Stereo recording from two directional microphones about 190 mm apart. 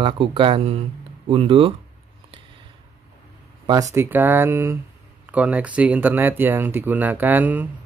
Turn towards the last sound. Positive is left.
turn(degrees=-10)  # may be behind; listen again after turning